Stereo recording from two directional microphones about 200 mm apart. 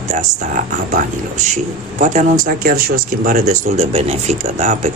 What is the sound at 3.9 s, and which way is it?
Speech, 30° right (ahead or behind).